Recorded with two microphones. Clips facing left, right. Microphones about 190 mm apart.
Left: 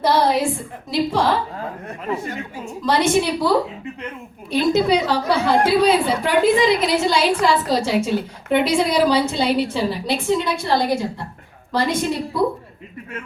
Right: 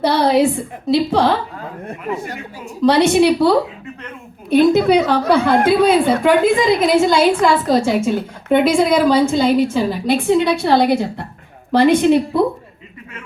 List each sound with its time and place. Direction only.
0.0 s a woman's voice: 65° right (ahead or behind)
2.8 s a woman's voice: 65° right (ahead or behind)
4.4 s a woman's voice: 55° right (ahead or behind)